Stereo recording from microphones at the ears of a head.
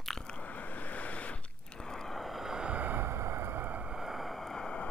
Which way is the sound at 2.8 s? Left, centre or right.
Right.